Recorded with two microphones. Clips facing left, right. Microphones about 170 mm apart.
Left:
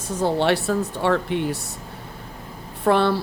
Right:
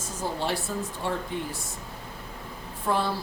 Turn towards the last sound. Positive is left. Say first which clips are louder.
# left 8 dB
turn(degrees=70)  # may be behind; listen again after turning